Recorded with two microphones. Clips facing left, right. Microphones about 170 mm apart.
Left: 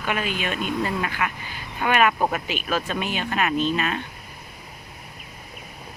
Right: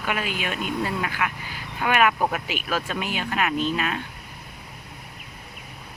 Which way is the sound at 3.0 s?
10° right (ahead or behind).